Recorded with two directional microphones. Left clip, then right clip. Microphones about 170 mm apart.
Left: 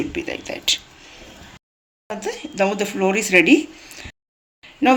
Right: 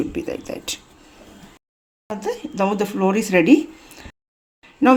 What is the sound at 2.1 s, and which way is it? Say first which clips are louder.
Speech: right 1 dB; 45° right (ahead or behind).